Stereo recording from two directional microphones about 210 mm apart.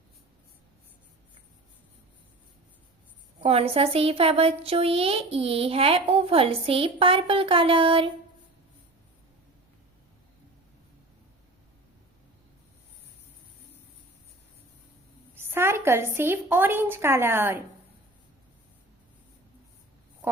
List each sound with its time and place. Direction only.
3.4 s speech: 30° right (ahead or behind)
15.4 s a woman's voice: 10° right (ahead or behind)